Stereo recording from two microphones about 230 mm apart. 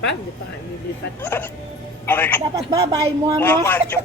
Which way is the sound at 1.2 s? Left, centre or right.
Centre.